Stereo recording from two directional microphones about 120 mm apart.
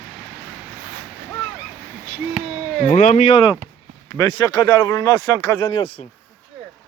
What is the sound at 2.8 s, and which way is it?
Speech, 90° left.